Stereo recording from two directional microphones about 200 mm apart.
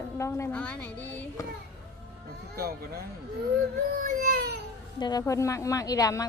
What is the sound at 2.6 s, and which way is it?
Speech, 50° right (ahead or behind).